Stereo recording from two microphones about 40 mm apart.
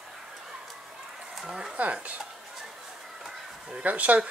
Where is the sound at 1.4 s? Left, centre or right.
Centre.